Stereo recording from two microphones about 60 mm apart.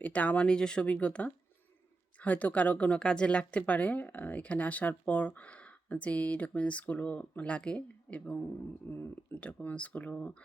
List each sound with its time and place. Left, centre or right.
0.0 s speech: left
8.8 s speech: left
9.3 s speech: left